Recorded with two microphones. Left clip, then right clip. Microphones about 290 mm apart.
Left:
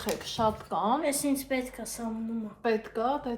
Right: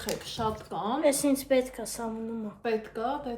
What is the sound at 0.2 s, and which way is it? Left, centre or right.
Speech, centre.